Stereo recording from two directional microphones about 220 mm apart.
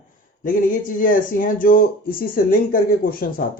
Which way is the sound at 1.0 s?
40° left (ahead or behind).